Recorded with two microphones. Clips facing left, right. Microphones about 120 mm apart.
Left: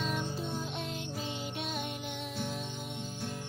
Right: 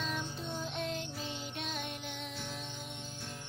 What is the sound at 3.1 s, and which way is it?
Music, 45° left (ahead or behind).